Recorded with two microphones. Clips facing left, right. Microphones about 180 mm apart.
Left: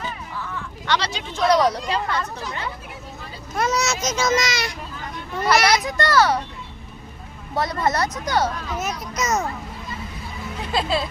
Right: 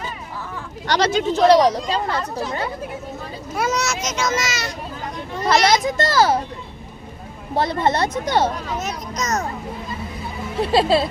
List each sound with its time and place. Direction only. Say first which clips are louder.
0.5 s speech: right 3 dB; 40° right (ahead or behind)
3.5 s speech: even; 5° right (ahead or behind)
4.0 s a child's voice: left 1 dB; 35° left (ahead or behind)
4.4 s speech: left 1 dB; 15° left (ahead or behind)
5.5 s speech: right 2 dB; 25° right (ahead or behind)
7.5 s speech: right 3 dB; 30° right (ahead or behind)
8.8 s speech: even; 10° left (ahead or behind)
10.6 s speech: right 7 dB; 35° right (ahead or behind)